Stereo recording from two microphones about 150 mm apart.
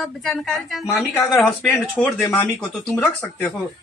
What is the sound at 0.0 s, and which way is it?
Speech, centre (ahead or behind).